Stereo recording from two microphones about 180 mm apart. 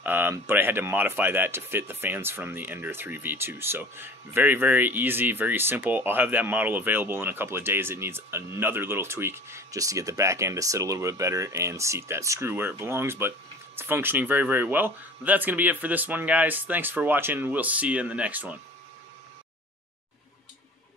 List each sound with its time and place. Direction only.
0.0 s speech: 10° right (ahead or behind)